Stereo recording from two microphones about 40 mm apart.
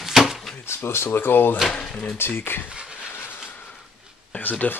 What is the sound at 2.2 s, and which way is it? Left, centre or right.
Speech, left.